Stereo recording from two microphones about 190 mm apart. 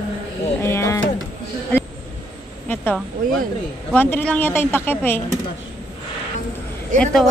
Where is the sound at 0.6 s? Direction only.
15° left (ahead or behind).